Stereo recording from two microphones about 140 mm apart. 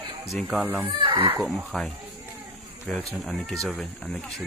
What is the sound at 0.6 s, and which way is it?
Speech, 10° right (ahead or behind).